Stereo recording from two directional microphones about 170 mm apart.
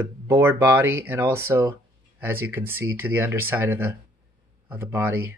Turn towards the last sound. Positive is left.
turn(degrees=-10)  # may be behind; listen again after turning